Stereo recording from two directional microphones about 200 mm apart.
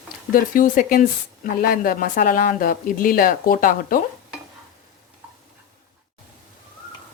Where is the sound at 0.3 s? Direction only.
40° left (ahead or behind).